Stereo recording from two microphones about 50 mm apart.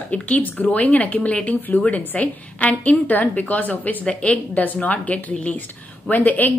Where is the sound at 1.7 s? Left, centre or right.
Left.